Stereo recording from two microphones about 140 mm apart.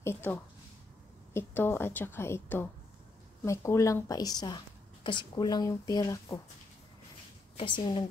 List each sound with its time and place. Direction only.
0.0 s a woman's voice: 15° left (ahead or behind)
7.5 s a woman's voice: 35° left (ahead or behind)